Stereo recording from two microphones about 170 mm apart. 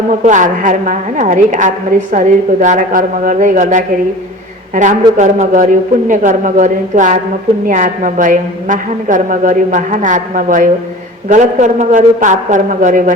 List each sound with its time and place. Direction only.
0.3 s a woman's voice: 50° right (ahead or behind)